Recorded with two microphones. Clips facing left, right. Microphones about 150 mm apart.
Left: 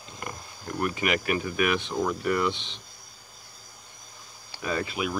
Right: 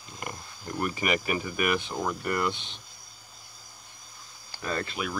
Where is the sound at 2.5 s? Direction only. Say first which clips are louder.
Left 2 dB; 50° right (ahead or behind).